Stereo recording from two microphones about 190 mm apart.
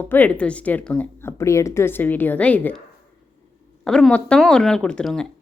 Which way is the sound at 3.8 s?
5° left (ahead or behind).